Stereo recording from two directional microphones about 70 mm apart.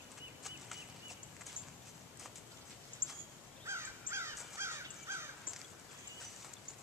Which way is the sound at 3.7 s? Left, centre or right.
Right.